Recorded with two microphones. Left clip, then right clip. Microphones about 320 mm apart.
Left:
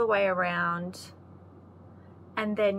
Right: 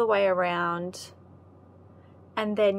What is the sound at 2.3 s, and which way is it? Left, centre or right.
Speech, right.